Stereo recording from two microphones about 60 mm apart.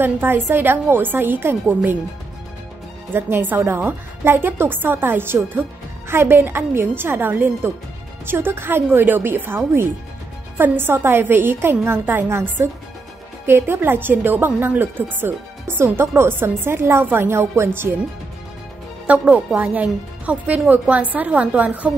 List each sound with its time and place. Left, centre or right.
0.0 s a woman's voice: right
3.1 s a woman's voice: right
19.0 s speech: right